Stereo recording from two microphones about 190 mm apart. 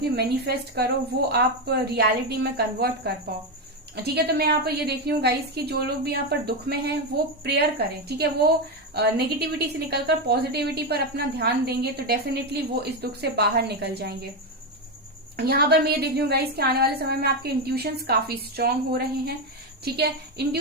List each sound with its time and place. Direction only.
0.2 s a woman's voice: 55° right (ahead or behind)
15.4 s a woman's voice: 55° right (ahead or behind)